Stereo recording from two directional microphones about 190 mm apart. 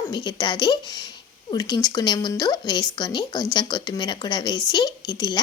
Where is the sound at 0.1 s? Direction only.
25° left (ahead or behind).